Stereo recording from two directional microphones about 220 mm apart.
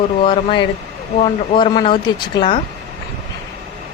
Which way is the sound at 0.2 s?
25° left (ahead or behind).